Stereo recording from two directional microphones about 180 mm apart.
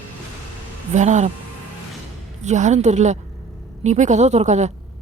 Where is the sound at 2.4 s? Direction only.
40° right (ahead or behind).